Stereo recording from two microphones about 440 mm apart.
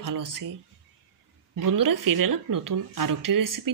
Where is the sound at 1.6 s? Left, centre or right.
Right.